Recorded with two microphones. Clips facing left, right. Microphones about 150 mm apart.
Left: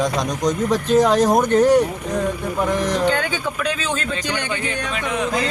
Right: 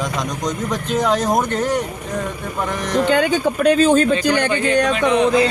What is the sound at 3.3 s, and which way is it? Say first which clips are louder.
Speech: right 8 dB; 45° right (ahead or behind).